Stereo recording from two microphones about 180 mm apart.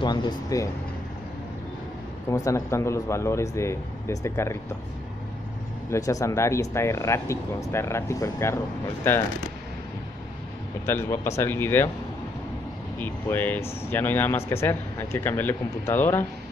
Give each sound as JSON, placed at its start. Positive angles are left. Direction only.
{"t": 0.0, "sound": "speech", "side_deg": 25}
{"t": 2.2, "sound": "speech", "side_deg": 20}
{"t": 5.9, "sound": "speech", "side_deg": 20}
{"t": 10.9, "sound": "speech", "side_deg": 15}
{"t": 13.0, "sound": "speech", "side_deg": 10}